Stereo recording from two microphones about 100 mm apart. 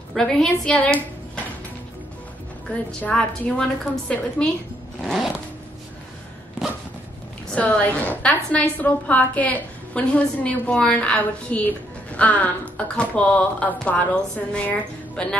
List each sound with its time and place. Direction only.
0.1 s speech: 5° left (ahead or behind)
3.0 s a woman's voice: 10° left (ahead or behind)
5.0 s zipper: 5° left (ahead or behind)
7.5 s a woman's voice: 15° left (ahead or behind)